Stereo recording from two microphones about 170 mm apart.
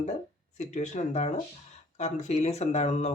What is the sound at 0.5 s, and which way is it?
Speech, 45° left (ahead or behind).